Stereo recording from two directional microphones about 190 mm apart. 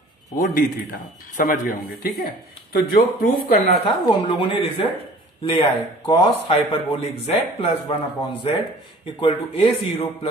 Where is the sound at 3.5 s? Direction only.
30° left (ahead or behind).